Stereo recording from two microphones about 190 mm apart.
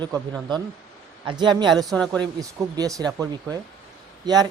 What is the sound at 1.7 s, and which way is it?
Speech, centre (ahead or behind).